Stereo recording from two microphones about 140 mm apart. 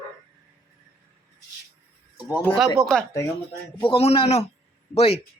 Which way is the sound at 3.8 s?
40° left (ahead or behind).